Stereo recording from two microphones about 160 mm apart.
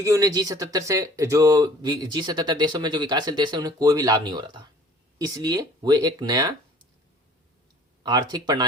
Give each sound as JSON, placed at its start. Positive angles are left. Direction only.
{"t": 0.0, "sound": "speech", "side_deg": -20}
{"t": 8.0, "sound": "speech", "side_deg": -25}